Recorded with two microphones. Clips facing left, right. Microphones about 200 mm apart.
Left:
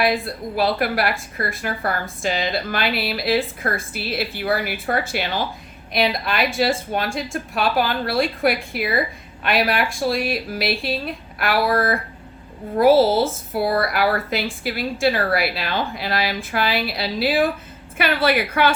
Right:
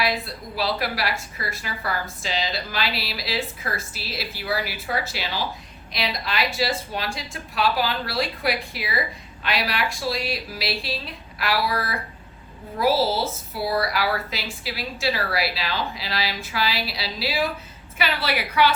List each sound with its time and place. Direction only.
0.0 s a woman's voice: 50° left (ahead or behind)